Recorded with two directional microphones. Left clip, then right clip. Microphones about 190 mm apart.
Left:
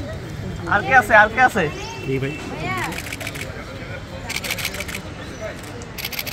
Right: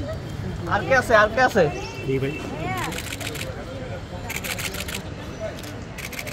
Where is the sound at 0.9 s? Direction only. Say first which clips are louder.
Left 4 dB; 35° right (ahead or behind).